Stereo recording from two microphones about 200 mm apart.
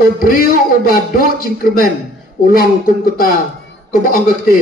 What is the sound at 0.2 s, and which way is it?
A man's voice, 45° left (ahead or behind).